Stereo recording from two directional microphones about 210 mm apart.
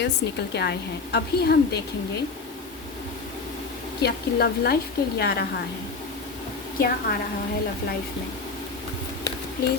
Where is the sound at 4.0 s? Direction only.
50° left (ahead or behind).